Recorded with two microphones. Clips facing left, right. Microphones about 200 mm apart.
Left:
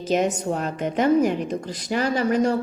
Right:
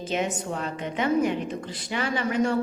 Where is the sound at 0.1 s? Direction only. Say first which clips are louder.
Left 7 dB; 40° left (ahead or behind).